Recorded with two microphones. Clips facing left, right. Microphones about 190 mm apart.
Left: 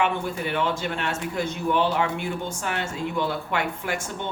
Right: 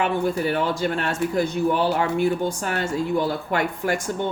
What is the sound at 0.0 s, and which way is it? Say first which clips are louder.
Speech: right 4 dB; 40° right (ahead or behind).